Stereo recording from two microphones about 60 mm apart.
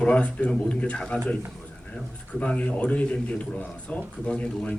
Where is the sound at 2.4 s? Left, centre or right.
Left.